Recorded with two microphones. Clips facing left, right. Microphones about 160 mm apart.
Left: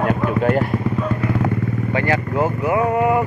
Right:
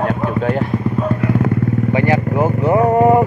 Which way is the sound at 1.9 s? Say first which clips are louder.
Right 2 dB; 20° right (ahead or behind).